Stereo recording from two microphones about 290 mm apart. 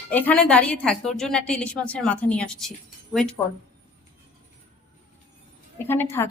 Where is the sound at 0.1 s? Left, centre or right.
Centre.